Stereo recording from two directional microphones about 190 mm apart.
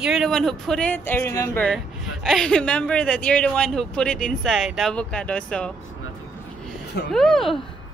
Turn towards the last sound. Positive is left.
turn(degrees=0)  # may be behind; listen again after turning